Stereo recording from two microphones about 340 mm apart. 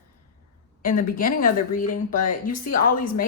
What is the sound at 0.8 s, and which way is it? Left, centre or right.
A woman's voice, left.